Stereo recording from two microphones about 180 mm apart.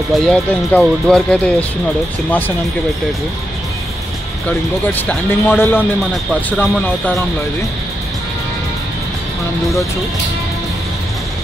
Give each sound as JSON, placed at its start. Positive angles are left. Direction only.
{"t": 0.1, "sound": "speech", "side_deg": 0}
{"t": 5.0, "sound": "speech", "side_deg": 10}